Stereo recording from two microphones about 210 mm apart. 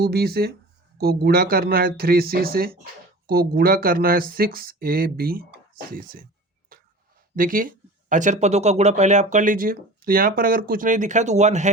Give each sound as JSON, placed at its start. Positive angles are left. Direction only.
{"t": 0.0, "sound": "speech", "side_deg": -50}
{"t": 6.7, "sound": "a sound", "side_deg": -45}
{"t": 7.3, "sound": "speech", "side_deg": -40}